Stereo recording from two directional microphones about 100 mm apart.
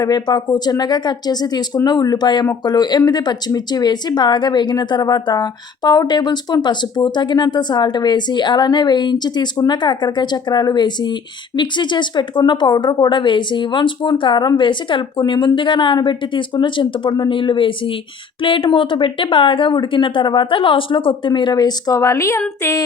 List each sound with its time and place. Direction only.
0.0 s speech: 45° left (ahead or behind); by 22.8 s 25° left (ahead or behind)